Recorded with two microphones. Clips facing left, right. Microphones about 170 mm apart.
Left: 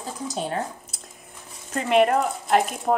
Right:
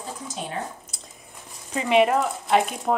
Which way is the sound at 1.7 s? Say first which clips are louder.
Even; centre (ahead or behind).